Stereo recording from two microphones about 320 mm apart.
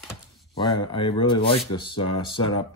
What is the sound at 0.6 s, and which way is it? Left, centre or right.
Speech, centre.